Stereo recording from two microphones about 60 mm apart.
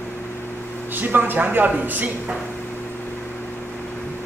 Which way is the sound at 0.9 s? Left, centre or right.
Right.